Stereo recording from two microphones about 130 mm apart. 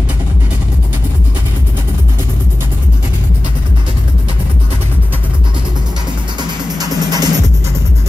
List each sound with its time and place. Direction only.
6.8 s music: 30° right (ahead or behind)